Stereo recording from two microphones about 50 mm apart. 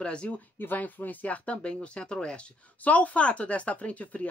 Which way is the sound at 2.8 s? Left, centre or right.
Left.